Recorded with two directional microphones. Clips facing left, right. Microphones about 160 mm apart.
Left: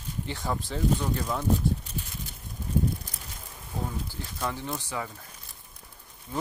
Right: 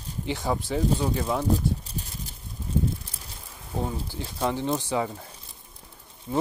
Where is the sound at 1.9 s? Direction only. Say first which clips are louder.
Right 1 dB; 35° right (ahead or behind).